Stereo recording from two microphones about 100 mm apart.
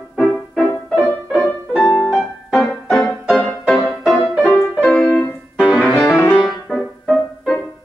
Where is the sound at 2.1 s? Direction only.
Centre (ahead or behind).